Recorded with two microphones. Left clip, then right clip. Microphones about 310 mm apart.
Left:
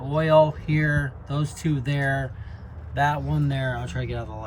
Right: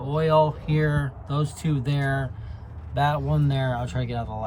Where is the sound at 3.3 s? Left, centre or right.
Centre.